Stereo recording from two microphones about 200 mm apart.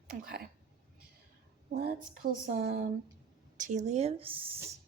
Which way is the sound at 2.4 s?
45° right (ahead or behind).